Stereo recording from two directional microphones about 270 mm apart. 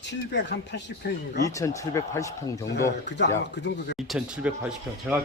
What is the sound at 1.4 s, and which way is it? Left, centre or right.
Speech, centre.